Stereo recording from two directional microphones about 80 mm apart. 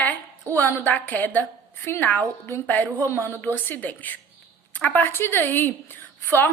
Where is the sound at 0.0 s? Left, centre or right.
Left.